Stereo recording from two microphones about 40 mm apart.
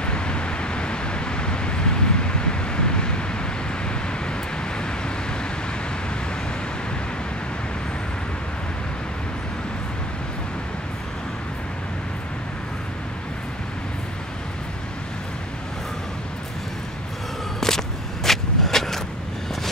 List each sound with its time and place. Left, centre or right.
0.0 s vehicle: left
17.6 s walk: centre